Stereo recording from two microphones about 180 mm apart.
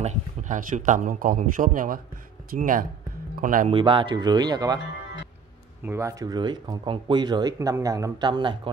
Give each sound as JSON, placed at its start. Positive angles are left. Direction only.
{"t": 0.0, "sound": "speech", "side_deg": -45}
{"t": 3.7, "sound": "speech", "side_deg": -30}
{"t": 5.9, "sound": "speech", "side_deg": -15}